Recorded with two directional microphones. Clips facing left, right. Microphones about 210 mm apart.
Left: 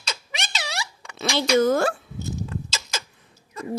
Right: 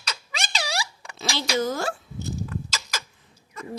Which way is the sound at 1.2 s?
55° left (ahead or behind).